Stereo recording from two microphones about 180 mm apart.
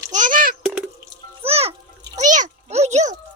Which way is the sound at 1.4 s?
35° right (ahead or behind).